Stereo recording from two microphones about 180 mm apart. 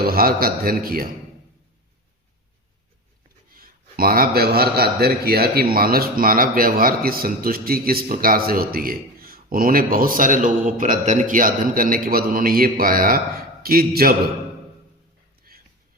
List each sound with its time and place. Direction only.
0.0 s a man's voice: 55° right (ahead or behind)
3.5 s a man's voice: 55° right (ahead or behind)
15.5 s a sound: 55° right (ahead or behind)